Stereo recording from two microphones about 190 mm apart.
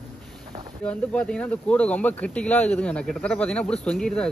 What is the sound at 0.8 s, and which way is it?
Speech, 5° left (ahead or behind).